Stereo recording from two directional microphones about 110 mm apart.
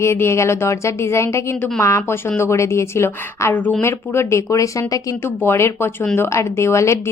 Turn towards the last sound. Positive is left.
turn(degrees=25)  # may be behind; listen again after turning